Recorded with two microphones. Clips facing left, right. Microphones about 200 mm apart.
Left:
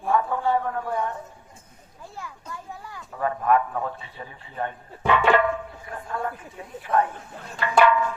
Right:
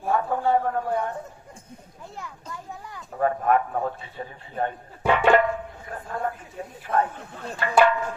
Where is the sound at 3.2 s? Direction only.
40° right (ahead or behind).